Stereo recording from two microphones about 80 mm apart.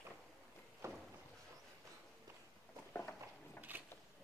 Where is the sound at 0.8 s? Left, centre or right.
Right.